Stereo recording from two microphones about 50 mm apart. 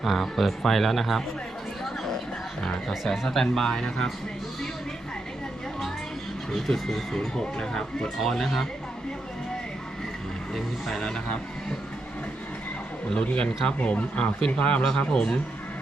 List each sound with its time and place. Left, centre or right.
0.0 s speech: centre
3.1 s speech: centre
6.5 s speech: centre
10.5 s speech: centre
13.1 s speech: left
14.8 s speech: centre